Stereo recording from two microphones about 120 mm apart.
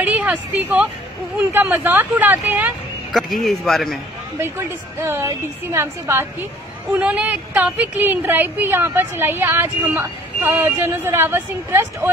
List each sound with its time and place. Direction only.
0.0 s a woman's voice: 15° right (ahead or behind)
3.1 s a man's voice: centre (ahead or behind)
4.4 s a woman's voice: 20° right (ahead or behind)
6.9 s a woman's voice: 10° right (ahead or behind)